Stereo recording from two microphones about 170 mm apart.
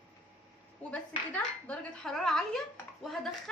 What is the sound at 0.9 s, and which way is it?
Speech, 5° left (ahead or behind).